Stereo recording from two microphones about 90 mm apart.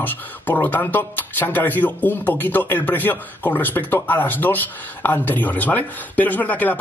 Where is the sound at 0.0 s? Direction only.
20° left (ahead or behind).